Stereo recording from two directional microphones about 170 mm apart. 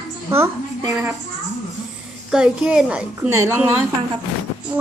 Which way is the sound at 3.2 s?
15° right (ahead or behind).